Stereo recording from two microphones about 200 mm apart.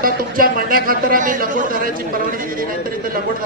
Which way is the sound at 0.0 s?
45° right (ahead or behind).